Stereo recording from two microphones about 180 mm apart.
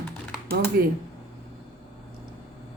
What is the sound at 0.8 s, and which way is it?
Speech, 55° right (ahead or behind).